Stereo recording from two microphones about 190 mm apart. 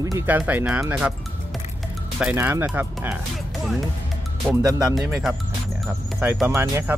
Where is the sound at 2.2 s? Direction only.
10° right (ahead or behind).